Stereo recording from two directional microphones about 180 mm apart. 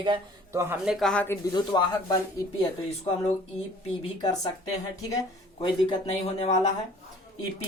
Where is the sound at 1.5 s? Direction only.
25° left (ahead or behind).